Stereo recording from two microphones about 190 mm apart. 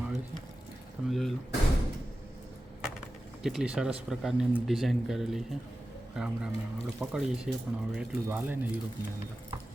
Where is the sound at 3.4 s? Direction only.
Centre (ahead or behind).